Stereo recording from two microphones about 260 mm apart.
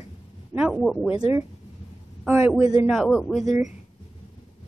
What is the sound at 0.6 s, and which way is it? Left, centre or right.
Speech, centre.